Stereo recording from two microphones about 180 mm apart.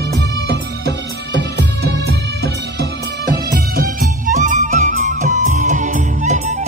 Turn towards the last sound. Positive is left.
turn(degrees=-40)  # may be behind; listen again after turning